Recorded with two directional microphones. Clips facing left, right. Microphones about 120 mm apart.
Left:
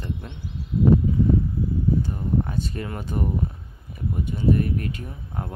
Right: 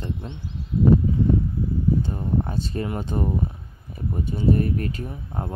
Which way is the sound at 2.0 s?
25° right (ahead or behind).